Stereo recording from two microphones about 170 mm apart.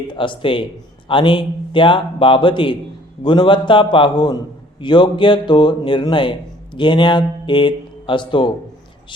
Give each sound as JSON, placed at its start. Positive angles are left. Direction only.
{"t": 0.1, "sound": "a man's voice", "side_deg": 30}